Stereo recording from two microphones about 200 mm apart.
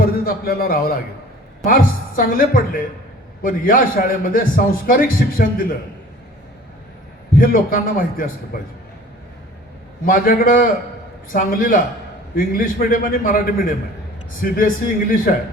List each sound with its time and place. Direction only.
0.0 s a man's voice: 50° left (ahead or behind)
7.3 s a man's voice: 45° left (ahead or behind)
10.1 s a man's voice: 45° left (ahead or behind)